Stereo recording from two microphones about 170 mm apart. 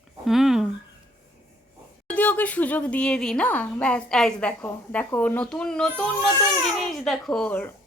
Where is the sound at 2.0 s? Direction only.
10° left (ahead or behind).